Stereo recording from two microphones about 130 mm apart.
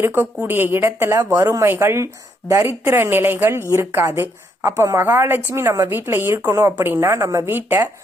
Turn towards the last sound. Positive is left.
turn(degrees=-20)  # may be behind; listen again after turning